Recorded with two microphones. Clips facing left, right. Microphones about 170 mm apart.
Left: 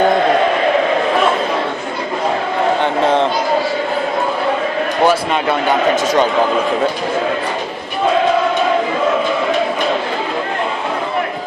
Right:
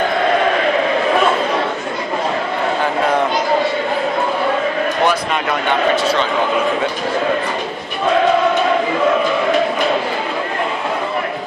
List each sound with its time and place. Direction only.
2.8 s speech: 25° left (ahead or behind)
5.0 s speech: 30° left (ahead or behind)
5.9 s a man's voice: 45° left (ahead or behind)